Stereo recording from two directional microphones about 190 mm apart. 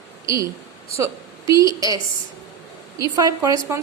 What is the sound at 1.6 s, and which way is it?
Speech, 20° right (ahead or behind).